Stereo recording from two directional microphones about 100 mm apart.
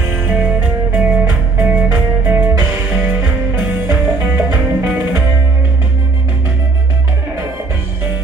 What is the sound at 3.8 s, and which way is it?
Music, 20° right (ahead or behind).